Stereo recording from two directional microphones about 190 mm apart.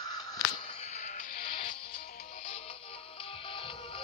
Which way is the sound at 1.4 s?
25° left (ahead or behind).